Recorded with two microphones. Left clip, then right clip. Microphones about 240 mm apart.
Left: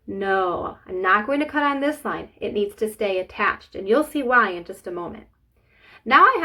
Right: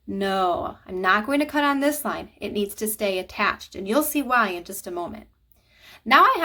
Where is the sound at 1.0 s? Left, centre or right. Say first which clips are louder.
Left 1 dB; right.